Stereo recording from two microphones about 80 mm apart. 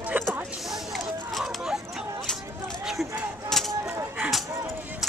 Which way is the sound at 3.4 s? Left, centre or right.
Centre.